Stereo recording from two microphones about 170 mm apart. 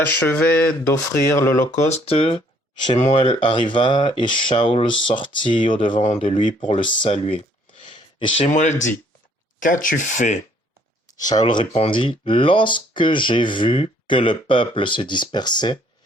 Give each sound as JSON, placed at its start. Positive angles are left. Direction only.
{"t": 0.3, "sound": "speech", "side_deg": 15}
{"t": 1.9, "sound": "speech", "side_deg": 35}
{"t": 7.9, "sound": "a sound", "side_deg": 30}
{"t": 8.5, "sound": "speech", "side_deg": 45}
{"t": 11.1, "sound": "speech", "side_deg": 25}